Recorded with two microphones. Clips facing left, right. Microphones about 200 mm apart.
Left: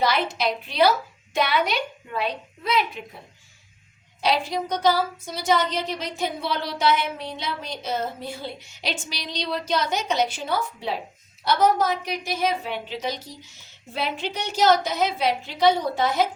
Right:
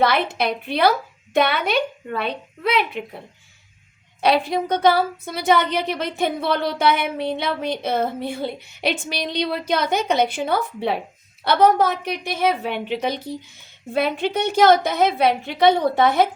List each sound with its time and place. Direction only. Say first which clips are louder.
0.0 s a woman's voice: right 3 dB; 60° right (ahead or behind)
4.2 s a woman's voice: right 5 dB; 60° right (ahead or behind)